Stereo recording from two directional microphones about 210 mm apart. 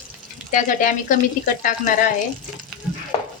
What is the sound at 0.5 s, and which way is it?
A woman's voice, 40° left (ahead or behind).